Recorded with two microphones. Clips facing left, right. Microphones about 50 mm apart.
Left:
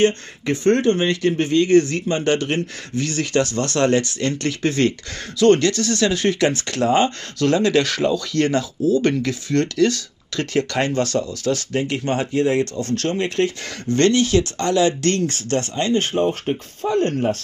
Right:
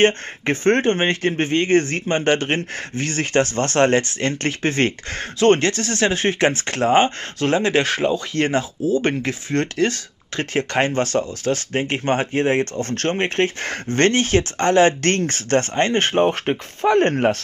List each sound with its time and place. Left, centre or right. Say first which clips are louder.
0.0 s speech: right 1 dB; right